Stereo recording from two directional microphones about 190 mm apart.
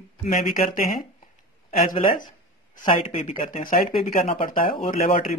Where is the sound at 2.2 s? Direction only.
45° left (ahead or behind).